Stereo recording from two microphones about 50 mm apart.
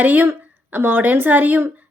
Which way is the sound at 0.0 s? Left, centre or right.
Right.